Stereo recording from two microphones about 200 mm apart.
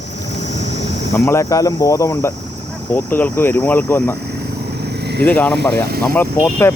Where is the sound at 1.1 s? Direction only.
15° left (ahead or behind).